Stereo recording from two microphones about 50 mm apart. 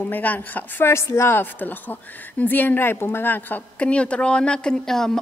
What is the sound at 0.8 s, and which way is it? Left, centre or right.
Speech, left.